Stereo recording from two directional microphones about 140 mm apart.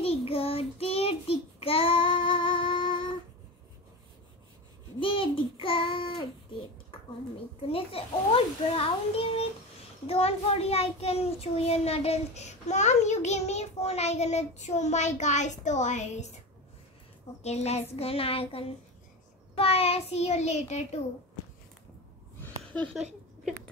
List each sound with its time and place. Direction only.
0.0 s child singing: 45° left (ahead or behind)
5.0 s child singing: 40° left (ahead or behind)
7.6 s a child's voice: 40° left (ahead or behind)
17.4 s a child's voice: 50° left (ahead or behind)
22.4 s a sound: 10° left (ahead or behind)